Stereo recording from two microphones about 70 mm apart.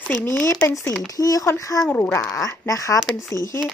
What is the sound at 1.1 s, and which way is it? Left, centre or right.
Speech, left.